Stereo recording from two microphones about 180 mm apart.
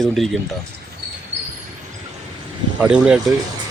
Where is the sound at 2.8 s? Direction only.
5° right (ahead or behind).